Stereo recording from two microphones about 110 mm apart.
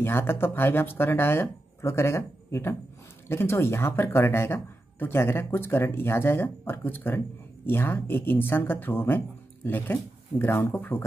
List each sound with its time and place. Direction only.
0.0 s speech: 20° left (ahead or behind)